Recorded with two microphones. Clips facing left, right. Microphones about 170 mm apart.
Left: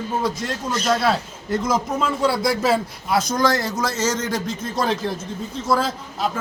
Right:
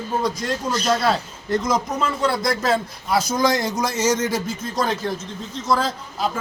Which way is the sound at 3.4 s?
15° right (ahead or behind).